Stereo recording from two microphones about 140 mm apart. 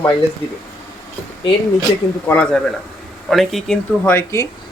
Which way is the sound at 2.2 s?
10° left (ahead or behind).